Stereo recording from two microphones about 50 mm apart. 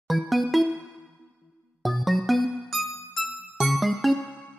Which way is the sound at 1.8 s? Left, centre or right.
Centre.